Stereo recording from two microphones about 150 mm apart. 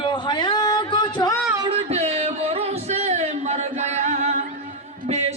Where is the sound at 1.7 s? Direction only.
45° right (ahead or behind).